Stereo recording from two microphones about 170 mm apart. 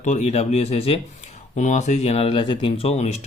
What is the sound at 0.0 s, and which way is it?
A man's voice, 45° left (ahead or behind).